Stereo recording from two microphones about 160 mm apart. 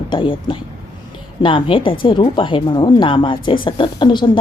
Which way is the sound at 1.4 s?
35° left (ahead or behind).